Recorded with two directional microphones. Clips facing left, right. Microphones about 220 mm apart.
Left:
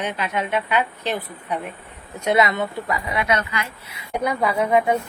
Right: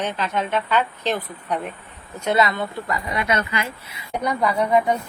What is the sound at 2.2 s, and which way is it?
Speech, 20° left (ahead or behind).